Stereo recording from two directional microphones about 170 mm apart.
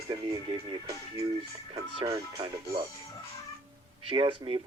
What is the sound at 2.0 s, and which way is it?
Speech, 25° right (ahead or behind).